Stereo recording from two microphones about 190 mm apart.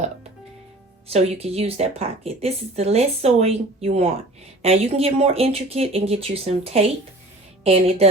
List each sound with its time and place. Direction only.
1.0 s speech: 35° right (ahead or behind)